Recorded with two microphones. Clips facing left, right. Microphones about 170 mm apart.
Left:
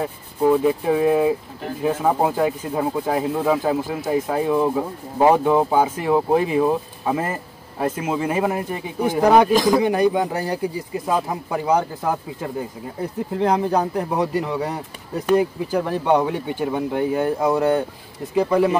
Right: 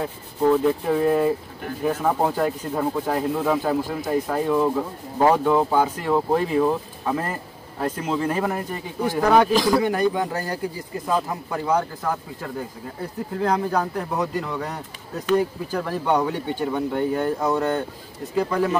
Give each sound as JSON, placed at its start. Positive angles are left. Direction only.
{"t": 0.0, "sound": "speech", "side_deg": 10}
{"t": 16.4, "sound": "speech", "side_deg": 15}